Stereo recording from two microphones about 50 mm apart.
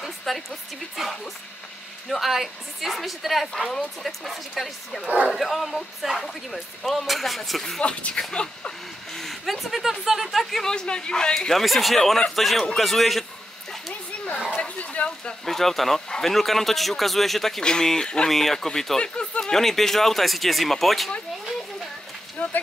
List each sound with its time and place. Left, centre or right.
0.0 s a sound: centre
1.0 s speech: centre
5.0 s speech: right
5.3 s speech: centre
7.8 s speech: left
9.2 s speech: centre
10.4 s speech: centre
14.5 s a sound: left
15.4 s speech: centre
18.3 s speech: centre
19.1 s a sound: left
19.5 s speech: centre
22.4 s a sound: left